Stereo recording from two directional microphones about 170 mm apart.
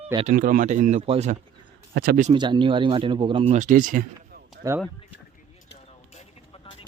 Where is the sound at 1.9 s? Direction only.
65° right (ahead or behind).